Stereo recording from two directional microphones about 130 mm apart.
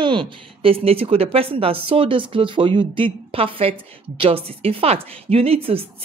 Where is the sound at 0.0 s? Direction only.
40° right (ahead or behind).